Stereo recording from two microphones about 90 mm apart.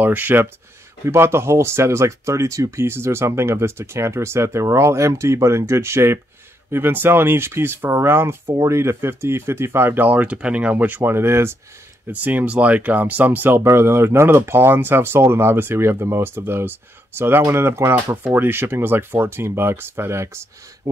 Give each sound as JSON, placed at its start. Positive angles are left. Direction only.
{"t": 0.0, "sound": "speech", "side_deg": -20}
{"t": 20.9, "sound": "speech", "side_deg": -45}